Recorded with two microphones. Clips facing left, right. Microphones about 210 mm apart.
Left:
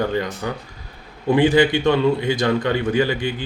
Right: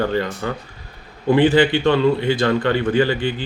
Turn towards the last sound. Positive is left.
turn(degrees=10)  # may be behind; listen again after turning